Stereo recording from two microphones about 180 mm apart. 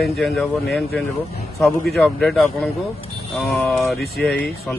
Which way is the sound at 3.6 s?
5° left (ahead or behind).